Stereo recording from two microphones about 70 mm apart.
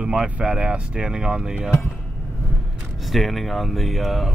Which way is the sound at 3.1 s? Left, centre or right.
Centre.